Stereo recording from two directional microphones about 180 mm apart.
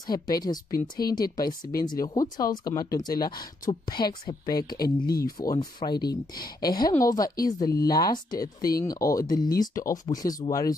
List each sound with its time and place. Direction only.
0.0 s speech: 20° left (ahead or behind)